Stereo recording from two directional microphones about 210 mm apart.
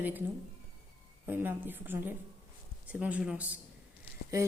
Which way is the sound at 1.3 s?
10° right (ahead or behind).